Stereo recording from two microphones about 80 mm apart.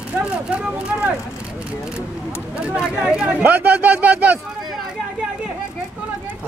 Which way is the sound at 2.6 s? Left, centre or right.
Centre.